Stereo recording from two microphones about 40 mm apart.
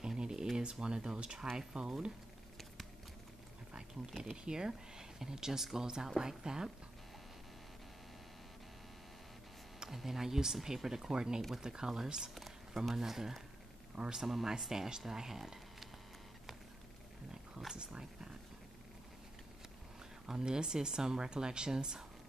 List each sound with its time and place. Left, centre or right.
0.0 s a sound: centre
0.6 s speech: right
4.2 s speech: centre
9.8 s speech: centre
17.3 s a sound: centre
17.7 s dog: right
20.2 s speech: centre